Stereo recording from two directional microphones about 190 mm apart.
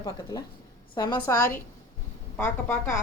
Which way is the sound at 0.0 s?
20° left (ahead or behind).